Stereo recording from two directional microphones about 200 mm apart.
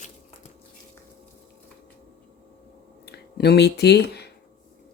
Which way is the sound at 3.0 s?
55° left (ahead or behind).